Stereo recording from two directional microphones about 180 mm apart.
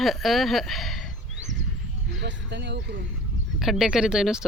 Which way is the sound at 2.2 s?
75° right (ahead or behind).